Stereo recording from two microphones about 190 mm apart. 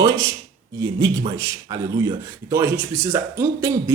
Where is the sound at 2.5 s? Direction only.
10° right (ahead or behind).